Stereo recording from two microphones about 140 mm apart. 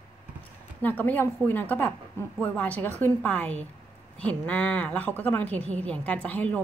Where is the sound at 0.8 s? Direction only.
10° left (ahead or behind).